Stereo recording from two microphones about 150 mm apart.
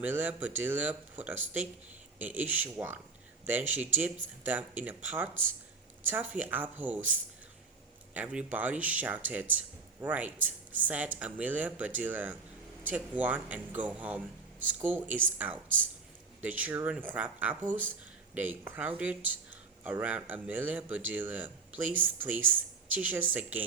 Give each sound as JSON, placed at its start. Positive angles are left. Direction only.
{"t": 0.0, "sound": "speech", "side_deg": -10}